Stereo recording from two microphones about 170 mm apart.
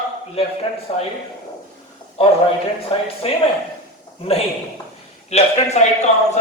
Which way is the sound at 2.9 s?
35° left (ahead or behind).